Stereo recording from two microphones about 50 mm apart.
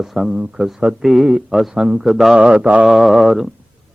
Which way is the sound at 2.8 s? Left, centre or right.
Centre.